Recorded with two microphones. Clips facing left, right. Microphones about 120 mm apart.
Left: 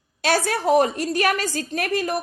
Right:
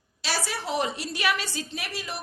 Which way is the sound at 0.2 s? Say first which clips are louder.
Left 10 dB; 55° left (ahead or behind).